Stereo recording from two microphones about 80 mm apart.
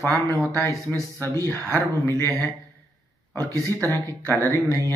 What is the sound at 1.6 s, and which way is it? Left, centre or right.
Speech, left.